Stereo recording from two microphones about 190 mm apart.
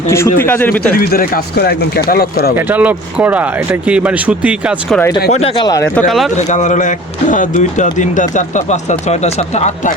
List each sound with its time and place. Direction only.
0.1 s speech: 10° left (ahead or behind)
0.9 s speech: 50° left (ahead or behind)
2.6 s speech: 10° right (ahead or behind)
5.3 s speech: 35° left (ahead or behind)
5.6 s speech: 15° left (ahead or behind)
6.1 s speech: centre (ahead or behind)
6.3 s speech: 40° left (ahead or behind)